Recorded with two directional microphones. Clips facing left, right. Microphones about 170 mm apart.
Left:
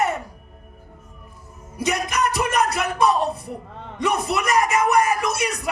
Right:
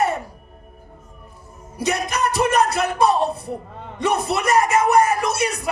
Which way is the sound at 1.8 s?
30° right (ahead or behind).